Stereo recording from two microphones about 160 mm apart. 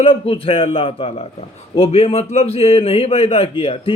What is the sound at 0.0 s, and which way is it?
Speech, 35° left (ahead or behind).